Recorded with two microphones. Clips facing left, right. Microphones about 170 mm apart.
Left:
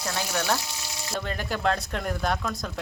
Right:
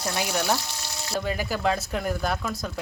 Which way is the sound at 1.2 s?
5° right (ahead or behind).